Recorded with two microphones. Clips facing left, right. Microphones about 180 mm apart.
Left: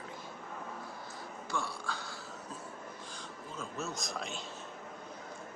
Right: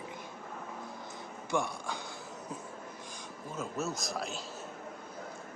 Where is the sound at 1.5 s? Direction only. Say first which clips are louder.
Right 5 dB; 15° right (ahead or behind).